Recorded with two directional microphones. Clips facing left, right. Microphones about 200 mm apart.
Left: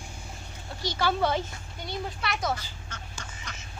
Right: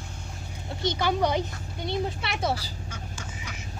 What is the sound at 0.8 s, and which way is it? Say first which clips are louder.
Speech: right 2 dB; 20° right (ahead or behind).